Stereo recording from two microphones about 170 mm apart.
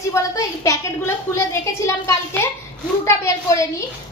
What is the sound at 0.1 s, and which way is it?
A child's voice, 15° left (ahead or behind).